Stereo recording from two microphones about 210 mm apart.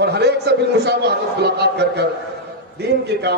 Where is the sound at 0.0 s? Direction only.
50° right (ahead or behind).